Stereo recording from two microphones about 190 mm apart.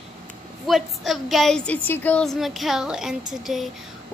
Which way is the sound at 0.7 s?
Centre (ahead or behind).